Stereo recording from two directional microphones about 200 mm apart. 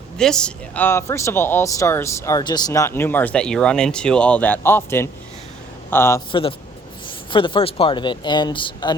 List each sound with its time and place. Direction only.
0.2 s speech: 5° left (ahead or behind)
7.3 s speech: 25° left (ahead or behind)